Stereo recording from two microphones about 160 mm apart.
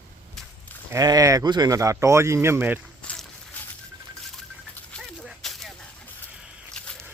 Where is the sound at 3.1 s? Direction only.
10° left (ahead or behind).